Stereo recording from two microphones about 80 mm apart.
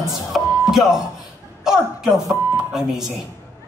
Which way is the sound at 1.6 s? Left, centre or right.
Centre.